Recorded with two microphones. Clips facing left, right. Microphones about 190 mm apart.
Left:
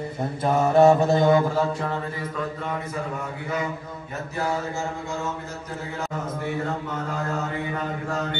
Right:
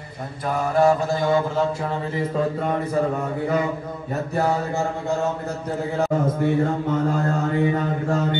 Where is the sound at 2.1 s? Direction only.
30° right (ahead or behind).